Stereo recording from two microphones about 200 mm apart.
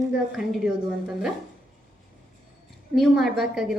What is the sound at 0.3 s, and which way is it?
Speech, 5° right (ahead or behind).